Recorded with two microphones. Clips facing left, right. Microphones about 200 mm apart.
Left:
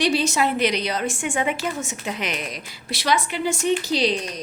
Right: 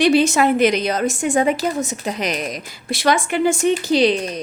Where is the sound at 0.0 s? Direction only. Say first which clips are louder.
Right 6 dB; 55° right (ahead or behind).